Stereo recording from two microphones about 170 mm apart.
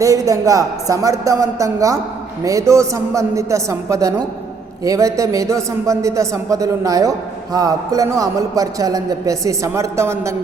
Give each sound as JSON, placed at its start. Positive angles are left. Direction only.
{"t": 0.0, "sound": "a woman's voice", "side_deg": -20}